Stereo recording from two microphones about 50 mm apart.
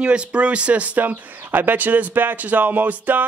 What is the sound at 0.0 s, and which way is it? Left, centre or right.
A man's voice, right.